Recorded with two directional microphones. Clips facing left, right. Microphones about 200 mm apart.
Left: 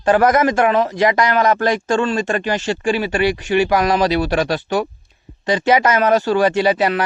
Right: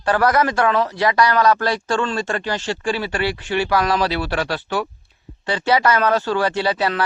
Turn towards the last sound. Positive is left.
turn(degrees=15)  # may be behind; listen again after turning